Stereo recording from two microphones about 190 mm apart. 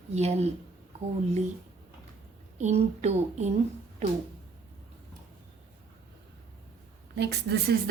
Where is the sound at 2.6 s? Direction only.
35° right (ahead or behind).